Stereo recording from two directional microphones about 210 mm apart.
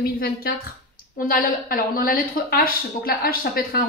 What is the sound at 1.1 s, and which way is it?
A woman's voice, 40° left (ahead or behind).